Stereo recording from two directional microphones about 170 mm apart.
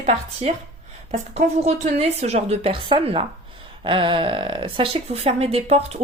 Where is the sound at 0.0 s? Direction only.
40° right (ahead or behind).